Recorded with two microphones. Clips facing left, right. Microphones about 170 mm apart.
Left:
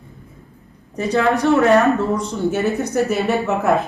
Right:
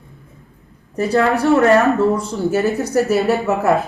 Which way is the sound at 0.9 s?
Centre (ahead or behind).